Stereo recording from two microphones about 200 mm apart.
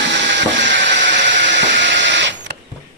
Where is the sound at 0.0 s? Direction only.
60° right (ahead or behind).